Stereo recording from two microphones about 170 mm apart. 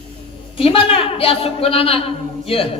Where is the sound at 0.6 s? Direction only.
35° left (ahead or behind).